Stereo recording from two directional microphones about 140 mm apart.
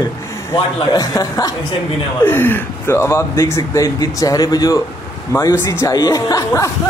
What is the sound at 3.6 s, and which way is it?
Speech, 25° left (ahead or behind).